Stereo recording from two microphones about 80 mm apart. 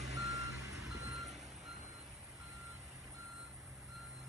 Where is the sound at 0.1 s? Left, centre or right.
Right.